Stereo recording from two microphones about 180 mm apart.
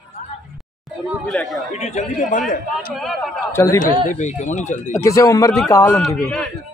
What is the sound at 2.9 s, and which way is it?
Speech, centre (ahead or behind).